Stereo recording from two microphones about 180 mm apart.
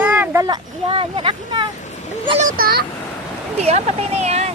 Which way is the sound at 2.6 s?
55° right (ahead or behind).